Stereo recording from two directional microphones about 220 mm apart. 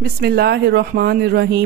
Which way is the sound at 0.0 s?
45° right (ahead or behind).